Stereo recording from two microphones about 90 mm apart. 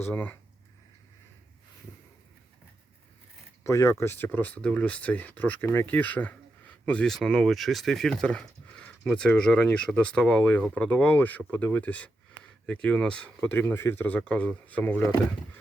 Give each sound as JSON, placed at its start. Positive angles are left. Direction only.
{"t": 0.1, "sound": "speech", "side_deg": 20}
{"t": 3.6, "sound": "speech", "side_deg": 35}